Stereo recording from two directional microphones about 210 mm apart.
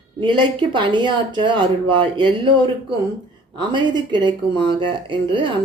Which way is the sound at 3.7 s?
20° right (ahead or behind).